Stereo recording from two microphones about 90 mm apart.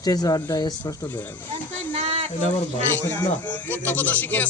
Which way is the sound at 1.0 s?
25° left (ahead or behind).